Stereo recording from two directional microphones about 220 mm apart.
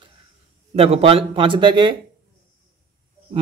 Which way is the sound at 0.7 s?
25° right (ahead or behind).